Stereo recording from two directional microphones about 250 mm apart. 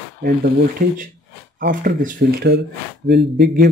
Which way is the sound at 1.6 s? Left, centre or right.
Right.